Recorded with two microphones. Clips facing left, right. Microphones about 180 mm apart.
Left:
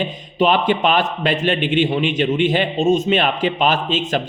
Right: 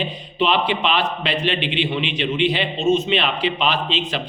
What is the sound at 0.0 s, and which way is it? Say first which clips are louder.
Speech: left 4 dB; 45° left (ahead or behind).